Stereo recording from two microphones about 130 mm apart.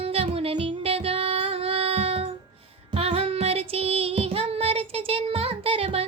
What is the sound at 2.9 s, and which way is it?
Child singing, 50° right (ahead or behind).